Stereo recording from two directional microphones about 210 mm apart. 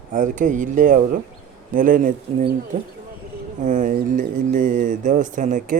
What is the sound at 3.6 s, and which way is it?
Speech, 35° right (ahead or behind).